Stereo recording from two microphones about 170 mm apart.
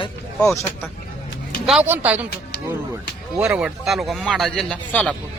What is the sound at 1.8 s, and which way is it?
Speech, 10° right (ahead or behind).